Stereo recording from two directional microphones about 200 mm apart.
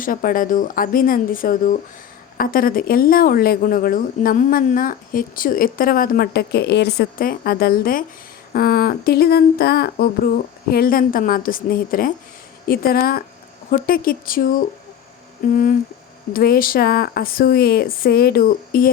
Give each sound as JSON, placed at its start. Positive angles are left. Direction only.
{"t": 0.0, "sound": "speech", "side_deg": 45}